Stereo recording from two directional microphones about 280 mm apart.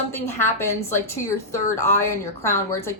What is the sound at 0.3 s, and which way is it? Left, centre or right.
A woman's voice, centre.